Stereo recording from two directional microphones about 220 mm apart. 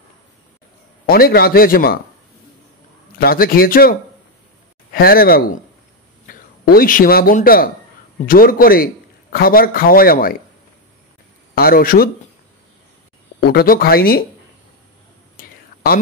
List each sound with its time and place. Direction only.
1.0 s a man's voice: 45° left (ahead or behind)
3.2 s a man's voice: 45° left (ahead or behind)
4.9 s a man's voice: 40° left (ahead or behind)
11.5 s a man's voice: 40° left (ahead or behind)
13.4 s a man's voice: 45° left (ahead or behind)
15.3 s whispering: 45° left (ahead or behind)